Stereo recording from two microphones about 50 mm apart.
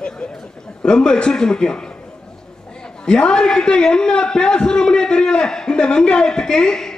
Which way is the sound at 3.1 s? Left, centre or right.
Centre.